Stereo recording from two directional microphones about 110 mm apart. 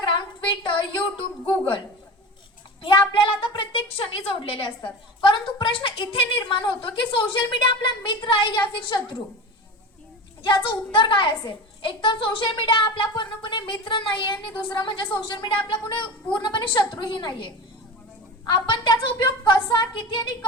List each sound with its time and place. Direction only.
0.6 s a sound: 50° left (ahead or behind)
2.8 s a woman's voice: 50° left (ahead or behind)
10.4 s a woman's voice: 50° left (ahead or behind)